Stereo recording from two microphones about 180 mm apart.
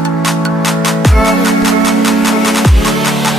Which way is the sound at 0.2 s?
Centre (ahead or behind).